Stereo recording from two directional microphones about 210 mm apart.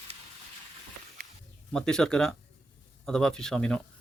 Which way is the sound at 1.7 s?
5° left (ahead or behind).